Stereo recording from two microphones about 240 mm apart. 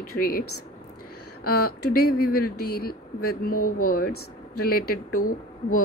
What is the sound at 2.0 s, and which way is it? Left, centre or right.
A woman's voice, left.